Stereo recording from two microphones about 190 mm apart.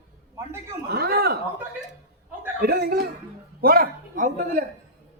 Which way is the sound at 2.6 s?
55° right (ahead or behind).